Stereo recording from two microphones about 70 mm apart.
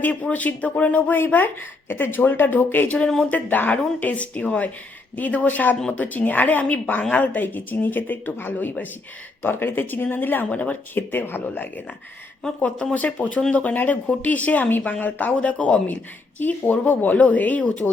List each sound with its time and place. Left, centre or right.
0.0 s speech: centre